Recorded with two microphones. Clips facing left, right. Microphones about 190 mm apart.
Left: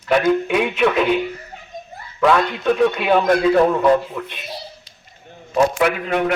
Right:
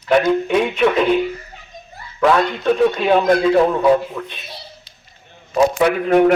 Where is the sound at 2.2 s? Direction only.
Centre (ahead or behind).